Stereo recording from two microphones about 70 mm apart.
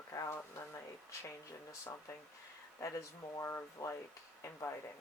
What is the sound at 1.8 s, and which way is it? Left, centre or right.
Speech, left.